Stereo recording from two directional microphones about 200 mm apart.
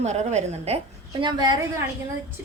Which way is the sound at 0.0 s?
35° right (ahead or behind).